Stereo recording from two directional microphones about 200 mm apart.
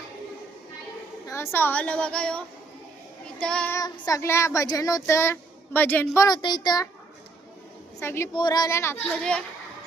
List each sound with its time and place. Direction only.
1.3 s speech: 15° left (ahead or behind)
3.2 s child singing: 5° left (ahead or behind)
3.8 s speech: 20° left (ahead or behind)
7.9 s speech: 15° left (ahead or behind)